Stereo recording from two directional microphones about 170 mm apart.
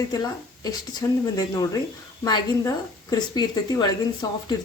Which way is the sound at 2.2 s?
20° left (ahead or behind).